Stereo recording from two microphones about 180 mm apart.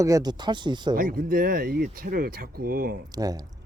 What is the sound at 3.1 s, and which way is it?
Speech, 20° right (ahead or behind).